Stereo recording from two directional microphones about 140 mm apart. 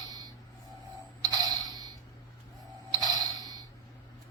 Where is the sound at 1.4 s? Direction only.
30° right (ahead or behind).